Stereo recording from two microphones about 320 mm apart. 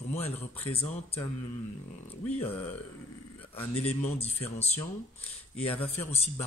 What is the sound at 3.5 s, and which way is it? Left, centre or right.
Speech, centre.